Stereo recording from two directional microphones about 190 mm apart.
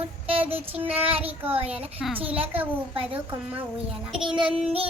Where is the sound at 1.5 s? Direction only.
30° right (ahead or behind).